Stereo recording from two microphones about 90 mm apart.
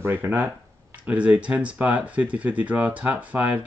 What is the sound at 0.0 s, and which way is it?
Speech, 25° right (ahead or behind).